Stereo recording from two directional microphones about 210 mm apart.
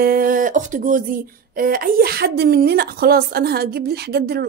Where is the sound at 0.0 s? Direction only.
45° right (ahead or behind).